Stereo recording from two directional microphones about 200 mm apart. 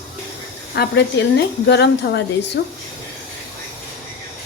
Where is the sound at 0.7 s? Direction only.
55° left (ahead or behind).